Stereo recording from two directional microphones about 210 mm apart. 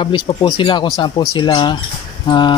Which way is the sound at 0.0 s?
25° left (ahead or behind).